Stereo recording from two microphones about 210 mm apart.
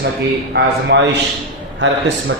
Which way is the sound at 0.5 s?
55° right (ahead or behind).